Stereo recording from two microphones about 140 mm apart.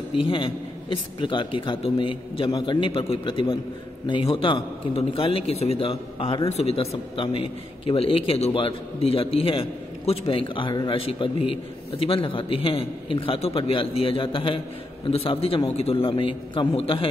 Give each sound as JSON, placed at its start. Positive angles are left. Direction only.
{"t": 0.3, "sound": "a man's voice", "side_deg": 40}